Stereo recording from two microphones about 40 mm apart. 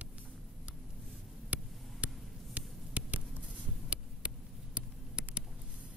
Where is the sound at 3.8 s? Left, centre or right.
Right.